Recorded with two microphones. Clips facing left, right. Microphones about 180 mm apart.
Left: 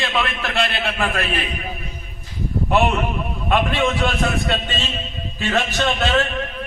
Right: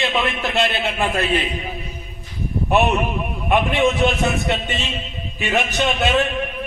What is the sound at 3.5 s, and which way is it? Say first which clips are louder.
A man's voice: right 2 dB; 20° right (ahead or behind).